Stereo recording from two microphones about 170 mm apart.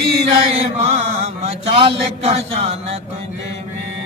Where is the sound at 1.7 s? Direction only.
30° right (ahead or behind).